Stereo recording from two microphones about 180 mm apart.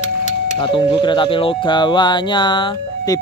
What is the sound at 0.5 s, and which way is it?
Speech, 25° left (ahead or behind).